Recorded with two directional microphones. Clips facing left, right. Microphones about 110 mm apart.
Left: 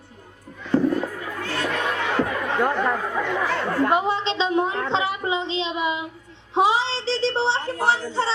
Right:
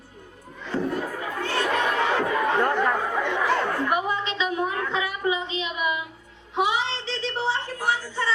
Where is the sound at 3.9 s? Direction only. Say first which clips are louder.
Left 4 dB; 25° left (ahead or behind).